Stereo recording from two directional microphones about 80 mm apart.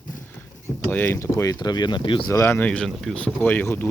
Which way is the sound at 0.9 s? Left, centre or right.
Left.